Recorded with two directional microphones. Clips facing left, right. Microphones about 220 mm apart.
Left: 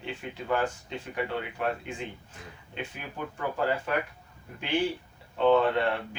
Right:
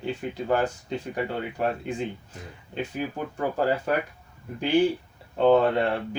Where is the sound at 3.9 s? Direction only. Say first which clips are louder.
Right 4 dB; 40° right (ahead or behind).